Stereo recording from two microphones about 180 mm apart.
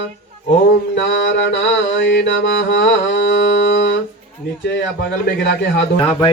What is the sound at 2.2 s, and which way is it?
Mantra, 85° left.